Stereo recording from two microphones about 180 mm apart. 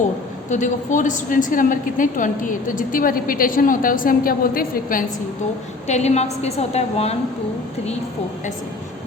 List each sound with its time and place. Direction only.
0.5 s a woman's voice: 45° left (ahead or behind)
5.9 s a woman's voice: 40° left (ahead or behind)